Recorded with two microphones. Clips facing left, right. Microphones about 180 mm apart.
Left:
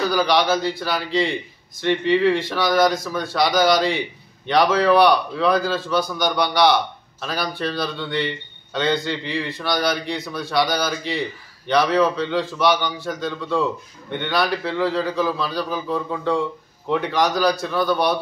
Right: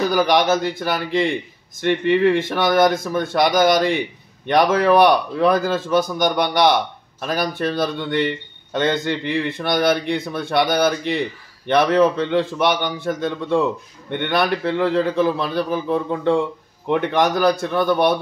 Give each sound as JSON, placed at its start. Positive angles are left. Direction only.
{"t": 0.1, "sound": "a man's voice", "side_deg": -50}